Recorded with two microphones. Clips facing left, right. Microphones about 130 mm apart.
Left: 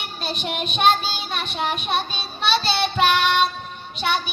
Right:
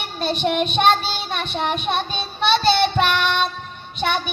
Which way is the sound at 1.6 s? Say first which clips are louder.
Right 1 dB; 25° right (ahead or behind).